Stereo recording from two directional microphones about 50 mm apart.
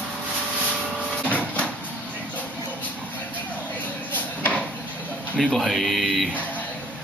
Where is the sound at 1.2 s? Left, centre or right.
Left.